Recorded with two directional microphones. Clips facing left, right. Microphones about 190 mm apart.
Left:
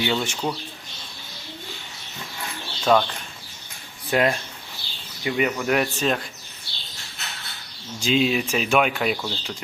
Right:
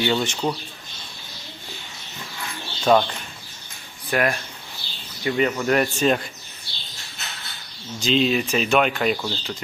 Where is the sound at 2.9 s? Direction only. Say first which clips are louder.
Right 2 dB; 5° right (ahead or behind).